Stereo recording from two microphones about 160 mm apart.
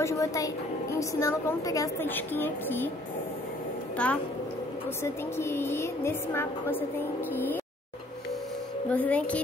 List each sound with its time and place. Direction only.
0.0 s a woman's voice: 20° left (ahead or behind)
3.9 s a woman's voice: 10° left (ahead or behind)
8.9 s a woman's voice: 10° left (ahead or behind)